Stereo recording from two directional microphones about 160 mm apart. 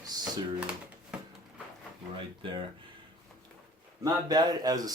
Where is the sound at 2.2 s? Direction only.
30° right (ahead or behind).